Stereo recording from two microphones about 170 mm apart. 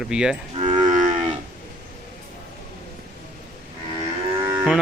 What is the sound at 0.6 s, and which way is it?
Moo, 45° right (ahead or behind).